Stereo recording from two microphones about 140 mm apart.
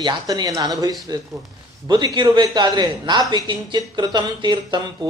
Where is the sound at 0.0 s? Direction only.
30° right (ahead or behind).